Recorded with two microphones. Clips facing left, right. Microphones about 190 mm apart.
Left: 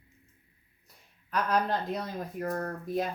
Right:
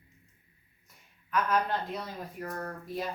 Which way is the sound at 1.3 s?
35° left (ahead or behind).